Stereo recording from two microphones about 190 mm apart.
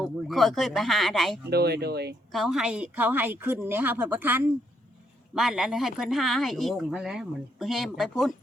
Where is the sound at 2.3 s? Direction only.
Centre (ahead or behind).